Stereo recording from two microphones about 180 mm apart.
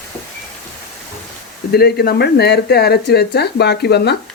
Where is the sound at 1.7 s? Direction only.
60° left (ahead or behind).